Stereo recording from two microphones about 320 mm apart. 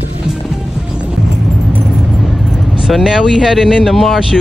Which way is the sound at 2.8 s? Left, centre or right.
Centre.